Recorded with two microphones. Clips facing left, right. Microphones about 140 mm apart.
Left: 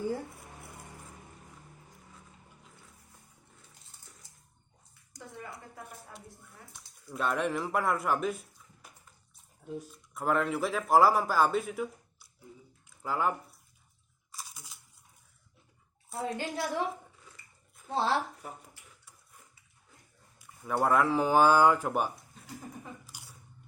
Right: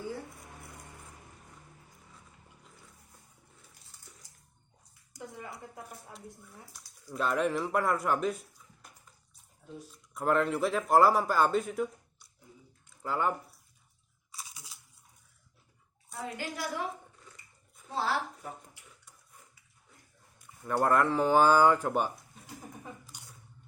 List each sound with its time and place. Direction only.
6.1 s speech: centre (ahead or behind)
9.9 s speech: centre (ahead or behind)
16.1 s a woman's voice: 30° left (ahead or behind)
17.8 s a woman's voice: 25° left (ahead or behind)
20.4 s speech: 5° left (ahead or behind)
23.0 s biting: 5° left (ahead or behind)